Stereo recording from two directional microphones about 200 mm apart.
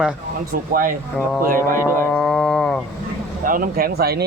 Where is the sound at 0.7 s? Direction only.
45° right (ahead or behind).